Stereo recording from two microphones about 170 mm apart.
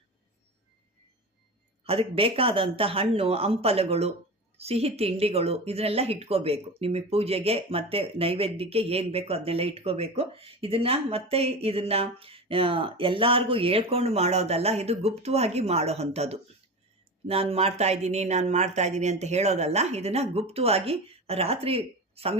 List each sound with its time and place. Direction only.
1.8 s speech: 35° right (ahead or behind)